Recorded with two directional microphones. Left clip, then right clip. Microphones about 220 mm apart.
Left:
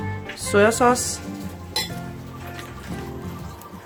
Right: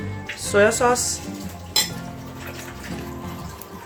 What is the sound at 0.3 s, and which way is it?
Speech, 45° left (ahead or behind).